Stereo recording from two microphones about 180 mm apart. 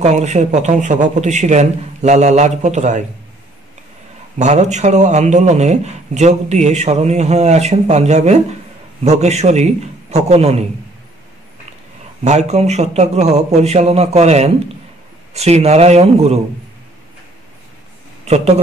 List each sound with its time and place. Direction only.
0.0 s a man's voice: 40° right (ahead or behind)
4.4 s a man's voice: 40° right (ahead or behind)
12.3 s a man's voice: 40° right (ahead or behind)
18.2 s a man's voice: 35° right (ahead or behind)